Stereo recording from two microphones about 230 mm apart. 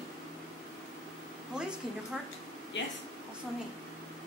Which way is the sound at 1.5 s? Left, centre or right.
Centre.